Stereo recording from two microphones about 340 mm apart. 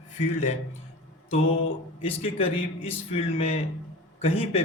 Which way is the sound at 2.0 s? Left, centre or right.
Centre.